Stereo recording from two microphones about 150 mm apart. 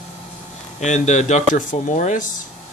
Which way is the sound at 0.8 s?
50° left (ahead or behind).